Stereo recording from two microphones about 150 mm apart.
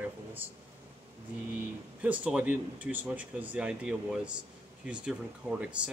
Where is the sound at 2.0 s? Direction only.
10° right (ahead or behind).